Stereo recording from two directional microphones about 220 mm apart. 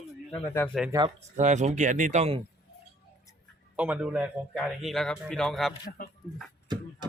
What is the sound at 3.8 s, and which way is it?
A man's voice, 5° right (ahead or behind).